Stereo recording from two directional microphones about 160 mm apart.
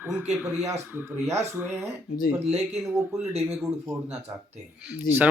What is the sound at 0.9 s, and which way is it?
Speech, 10° right (ahead or behind).